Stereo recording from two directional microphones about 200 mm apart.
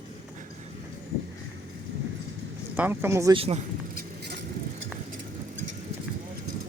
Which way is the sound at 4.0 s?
55° right (ahead or behind).